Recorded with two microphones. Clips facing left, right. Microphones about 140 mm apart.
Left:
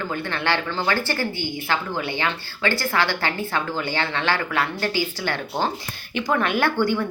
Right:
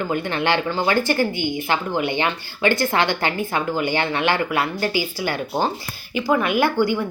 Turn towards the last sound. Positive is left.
turn(degrees=-10)  # may be behind; listen again after turning